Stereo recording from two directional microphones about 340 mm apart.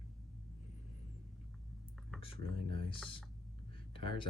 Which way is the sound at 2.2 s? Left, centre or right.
Centre.